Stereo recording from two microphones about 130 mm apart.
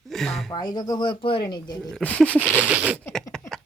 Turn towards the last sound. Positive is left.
turn(degrees=5)  # may be behind; listen again after turning